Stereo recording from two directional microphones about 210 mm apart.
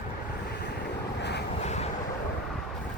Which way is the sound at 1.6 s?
35° left (ahead or behind).